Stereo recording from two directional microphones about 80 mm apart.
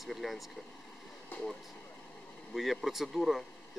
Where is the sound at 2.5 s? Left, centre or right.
Centre.